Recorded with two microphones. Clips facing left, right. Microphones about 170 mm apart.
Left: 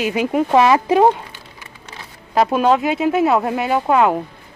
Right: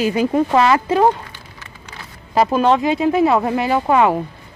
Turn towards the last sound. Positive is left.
turn(degrees=0)  # may be behind; listen again after turning